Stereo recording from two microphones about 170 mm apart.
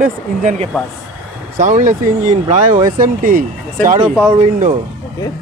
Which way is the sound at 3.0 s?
55° right (ahead or behind).